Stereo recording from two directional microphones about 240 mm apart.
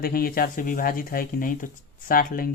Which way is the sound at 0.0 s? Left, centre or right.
Left.